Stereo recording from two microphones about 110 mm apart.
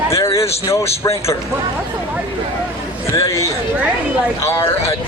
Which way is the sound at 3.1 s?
30° left (ahead or behind).